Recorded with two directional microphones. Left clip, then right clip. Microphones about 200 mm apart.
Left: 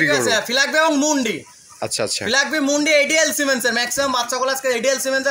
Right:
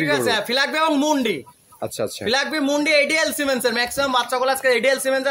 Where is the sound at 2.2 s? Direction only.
45° right (ahead or behind).